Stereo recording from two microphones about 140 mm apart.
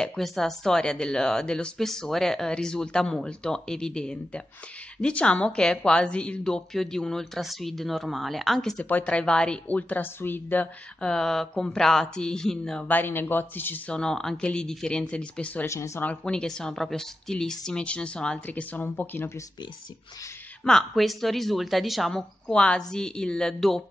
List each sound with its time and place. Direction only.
0.0 s a woman's voice: 5° left (ahead or behind); by 16.1 s 20° left (ahead or behind)
16.1 s a woman's voice: 5° left (ahead or behind)
20.6 s a woman's voice: centre (ahead or behind)